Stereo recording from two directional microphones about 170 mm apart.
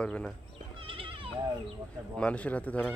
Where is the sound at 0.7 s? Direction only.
30° right (ahead or behind).